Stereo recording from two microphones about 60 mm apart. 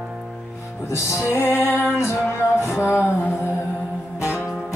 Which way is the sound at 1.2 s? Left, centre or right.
Left.